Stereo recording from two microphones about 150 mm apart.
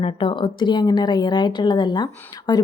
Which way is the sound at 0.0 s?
35° left (ahead or behind).